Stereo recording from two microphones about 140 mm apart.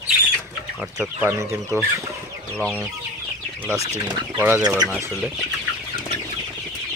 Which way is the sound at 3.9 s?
30° right (ahead or behind).